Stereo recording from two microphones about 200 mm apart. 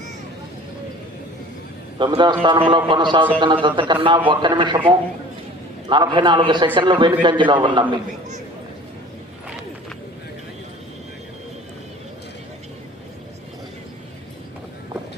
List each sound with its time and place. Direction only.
2.0 s a man's voice: 25° right (ahead or behind)